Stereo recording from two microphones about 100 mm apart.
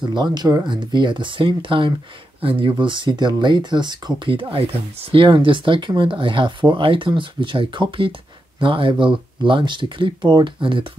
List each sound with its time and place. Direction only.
0.1 s speech: 45° right (ahead or behind)